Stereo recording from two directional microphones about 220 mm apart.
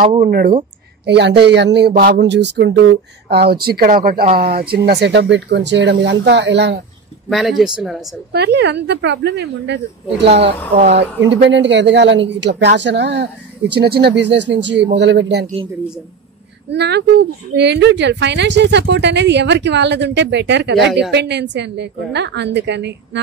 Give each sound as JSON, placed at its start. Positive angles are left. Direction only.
{"t": 0.2, "sound": "speech", "side_deg": -40}
{"t": 7.2, "sound": "speech", "side_deg": 0}
{"t": 8.3, "sound": "speech", "side_deg": -50}
{"t": 16.7, "sound": "speech", "side_deg": -50}